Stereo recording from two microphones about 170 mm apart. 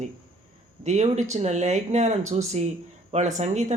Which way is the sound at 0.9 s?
40° right (ahead or behind).